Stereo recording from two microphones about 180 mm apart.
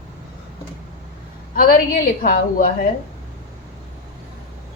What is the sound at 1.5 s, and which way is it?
A woman's voice, 50° left (ahead or behind).